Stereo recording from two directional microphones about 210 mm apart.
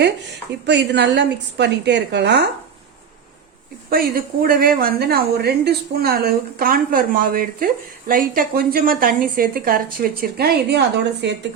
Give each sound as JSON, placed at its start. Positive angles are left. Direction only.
{"t": 0.6, "sound": "a woman's voice", "side_deg": -55}
{"t": 3.8, "sound": "a woman's voice", "side_deg": -45}